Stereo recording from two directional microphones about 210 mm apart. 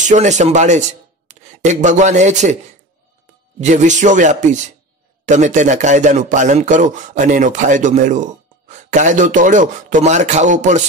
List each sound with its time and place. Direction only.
0.0 s speech: 35° right (ahead or behind)
3.5 s speech: 35° right (ahead or behind)